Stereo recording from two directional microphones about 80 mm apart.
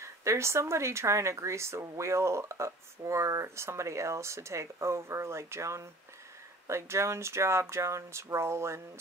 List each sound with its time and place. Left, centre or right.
0.0 s speech: right